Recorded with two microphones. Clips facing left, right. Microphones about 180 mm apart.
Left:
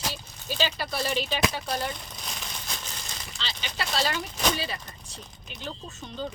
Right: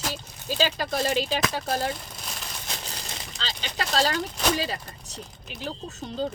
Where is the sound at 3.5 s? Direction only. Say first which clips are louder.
Right 2 dB; 40° right (ahead or behind).